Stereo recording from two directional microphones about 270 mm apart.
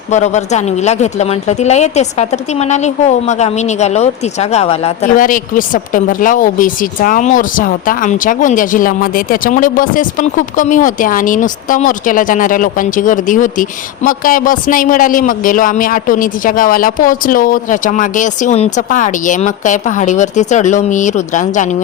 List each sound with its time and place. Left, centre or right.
0.1 s speech: left